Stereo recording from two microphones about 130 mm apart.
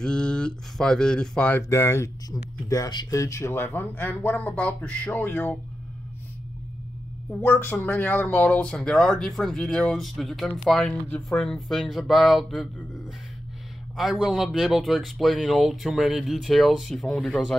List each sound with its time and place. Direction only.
0.0 s speech: 5° left (ahead or behind)
1.6 s speech: 20° left (ahead or behind)
7.3 s speech: 15° left (ahead or behind); by 12.6 s centre (ahead or behind)
13.9 s speech: 5° right (ahead or behind)